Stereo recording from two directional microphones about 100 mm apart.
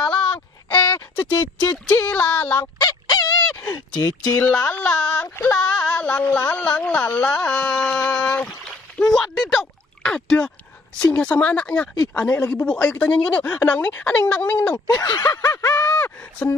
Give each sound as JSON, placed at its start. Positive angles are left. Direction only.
{"t": 0.0, "sound": "a sound", "side_deg": 10}
{"t": 2.0, "sound": "speech", "side_deg": 15}
{"t": 2.8, "sound": "fowl", "side_deg": 40}
{"t": 3.5, "sound": "a sound", "side_deg": 35}
{"t": 3.9, "sound": "speech", "side_deg": 15}
{"t": 5.3, "sound": "a sound", "side_deg": 15}
{"t": 6.2, "sound": "speech", "side_deg": 25}
{"t": 6.5, "sound": "speech", "side_deg": 15}
{"t": 8.6, "sound": "a sound", "side_deg": 5}
{"t": 11.1, "sound": "speech", "side_deg": 15}
{"t": 14.9, "sound": "snicker", "side_deg": 40}
{"t": 15.8, "sound": "speech", "side_deg": 15}